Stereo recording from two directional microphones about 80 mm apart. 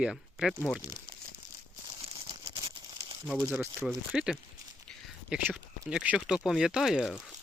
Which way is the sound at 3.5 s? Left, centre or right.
Right.